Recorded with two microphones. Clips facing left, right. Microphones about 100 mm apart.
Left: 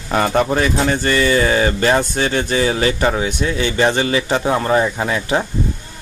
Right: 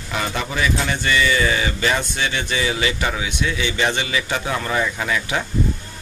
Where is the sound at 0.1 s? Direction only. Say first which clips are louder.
Left 9 dB; 45° left (ahead or behind).